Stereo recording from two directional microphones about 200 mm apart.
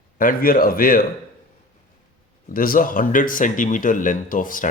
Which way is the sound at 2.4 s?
45° left (ahead or behind).